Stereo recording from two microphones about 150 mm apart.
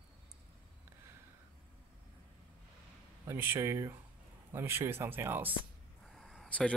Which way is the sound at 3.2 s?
15° right (ahead or behind).